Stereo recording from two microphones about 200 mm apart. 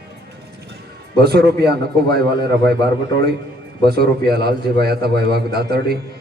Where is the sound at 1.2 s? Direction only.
50° right (ahead or behind).